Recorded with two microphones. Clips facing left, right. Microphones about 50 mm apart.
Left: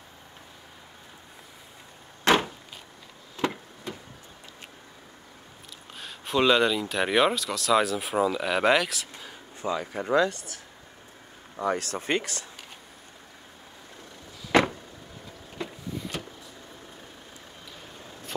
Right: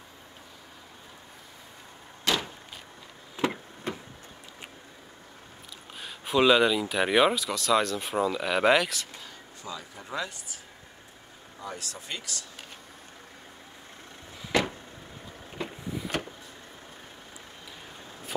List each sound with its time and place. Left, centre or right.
2.2 s a sound: left
3.4 s a sound: centre
5.9 s speech: centre
9.6 s speech: left
9.9 s speech: left
14.5 s vehicle: left